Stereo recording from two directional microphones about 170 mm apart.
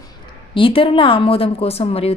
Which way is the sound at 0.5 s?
30° left (ahead or behind).